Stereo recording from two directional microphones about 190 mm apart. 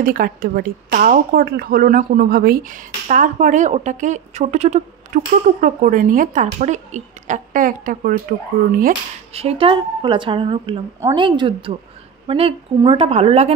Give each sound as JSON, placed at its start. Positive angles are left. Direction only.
{"t": 0.0, "sound": "speech", "side_deg": -50}
{"t": 9.3, "sound": "a woman's voice", "side_deg": -30}